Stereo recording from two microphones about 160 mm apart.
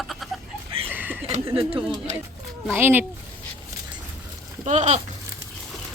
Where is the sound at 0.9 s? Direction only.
10° right (ahead or behind).